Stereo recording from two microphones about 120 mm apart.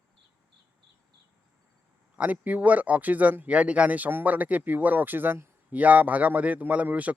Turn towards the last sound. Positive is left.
turn(degrees=-10)  # may be behind; listen again after turning